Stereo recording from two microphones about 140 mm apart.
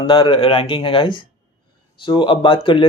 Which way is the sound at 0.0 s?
35° left (ahead or behind).